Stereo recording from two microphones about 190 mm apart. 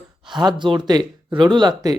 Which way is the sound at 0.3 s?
25° right (ahead or behind).